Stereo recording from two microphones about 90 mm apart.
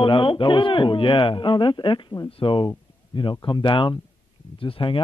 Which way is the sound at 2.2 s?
80° left.